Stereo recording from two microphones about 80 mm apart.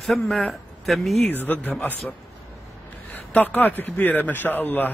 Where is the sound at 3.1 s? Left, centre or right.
Left.